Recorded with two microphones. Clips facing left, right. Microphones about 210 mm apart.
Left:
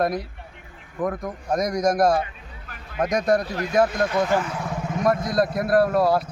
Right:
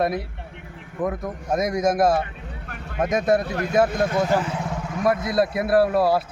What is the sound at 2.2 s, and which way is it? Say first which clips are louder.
Vehicle: right 4 dB; 60° right (ahead or behind).